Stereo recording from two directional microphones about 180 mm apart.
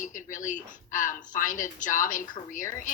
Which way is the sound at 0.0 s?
45° left (ahead or behind).